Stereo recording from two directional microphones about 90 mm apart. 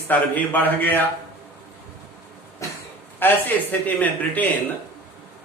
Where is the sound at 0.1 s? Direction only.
20° left (ahead or behind).